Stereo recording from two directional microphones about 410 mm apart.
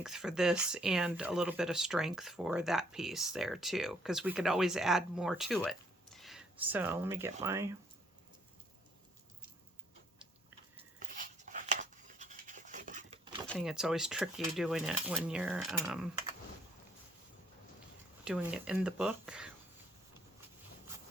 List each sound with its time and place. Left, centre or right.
0.0 s speech: centre
11.0 s a sound: centre
13.5 s speech: centre
18.3 s speech: centre